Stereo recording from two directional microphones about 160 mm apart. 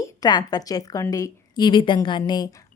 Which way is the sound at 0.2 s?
25° left (ahead or behind).